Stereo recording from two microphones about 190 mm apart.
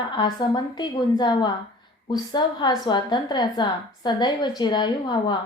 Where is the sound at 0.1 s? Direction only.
20° left (ahead or behind).